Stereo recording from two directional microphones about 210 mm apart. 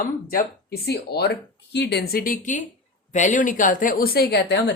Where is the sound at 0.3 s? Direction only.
45° left (ahead or behind).